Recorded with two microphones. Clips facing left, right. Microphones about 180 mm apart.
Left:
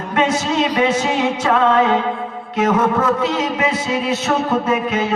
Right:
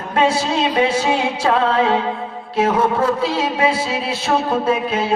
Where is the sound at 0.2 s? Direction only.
30° right (ahead or behind).